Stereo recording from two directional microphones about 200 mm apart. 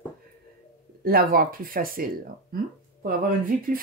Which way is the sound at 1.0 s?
50° right (ahead or behind).